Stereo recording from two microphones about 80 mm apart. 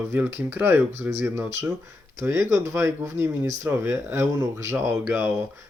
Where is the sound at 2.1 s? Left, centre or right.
Right.